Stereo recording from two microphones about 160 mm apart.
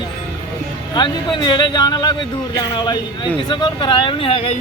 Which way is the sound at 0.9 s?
30° left (ahead or behind).